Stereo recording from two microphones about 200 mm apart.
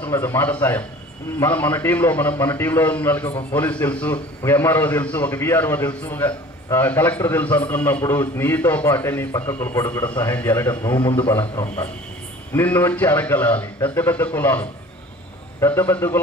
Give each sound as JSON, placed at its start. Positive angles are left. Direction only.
{"t": 0.0, "sound": "a man's voice", "side_deg": 10}